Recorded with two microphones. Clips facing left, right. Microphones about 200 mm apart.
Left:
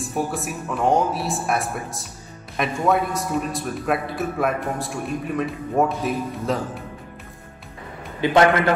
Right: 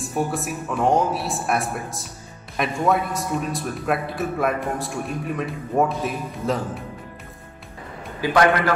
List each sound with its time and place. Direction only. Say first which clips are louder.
0.0 s a man's voice: right 1 dB; centre (ahead or behind)
8.2 s a man's voice: left 2 dB; 25° left (ahead or behind)